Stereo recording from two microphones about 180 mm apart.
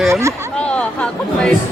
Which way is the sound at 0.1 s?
15° right (ahead or behind).